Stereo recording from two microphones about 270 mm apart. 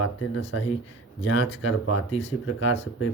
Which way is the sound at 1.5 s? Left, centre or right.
Left.